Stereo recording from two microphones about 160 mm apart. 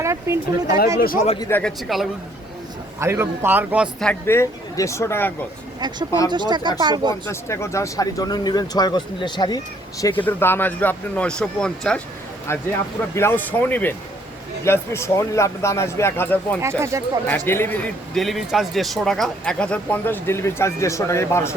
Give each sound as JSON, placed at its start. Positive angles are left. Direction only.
{"t": 0.0, "sound": "a man's voice", "side_deg": -15}
{"t": 0.9, "sound": "speech", "side_deg": 65}
{"t": 1.4, "sound": "a man's voice", "side_deg": 15}
{"t": 3.0, "sound": "a man's voice", "side_deg": -15}
{"t": 4.0, "sound": "a man's voice", "side_deg": 10}
{"t": 6.3, "sound": "speech", "side_deg": -30}
{"t": 7.1, "sound": "speech", "side_deg": 15}
{"t": 10.0, "sound": "a man's voice", "side_deg": 10}
{"t": 12.5, "sound": "a man's voice", "side_deg": 15}
{"t": 16.6, "sound": "a man's voice", "side_deg": -15}
{"t": 17.2, "sound": "a man's voice", "side_deg": 10}